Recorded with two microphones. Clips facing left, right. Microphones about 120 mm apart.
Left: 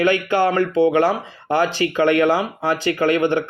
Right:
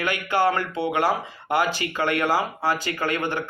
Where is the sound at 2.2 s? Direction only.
20° left (ahead or behind).